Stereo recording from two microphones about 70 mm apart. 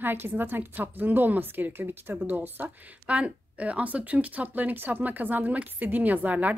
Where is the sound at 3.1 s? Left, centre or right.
Centre.